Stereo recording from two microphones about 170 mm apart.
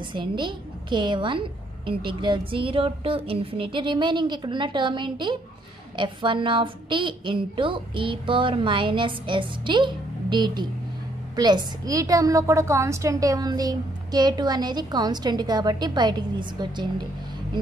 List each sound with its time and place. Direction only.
0.1 s a woman's voice: 30° right (ahead or behind)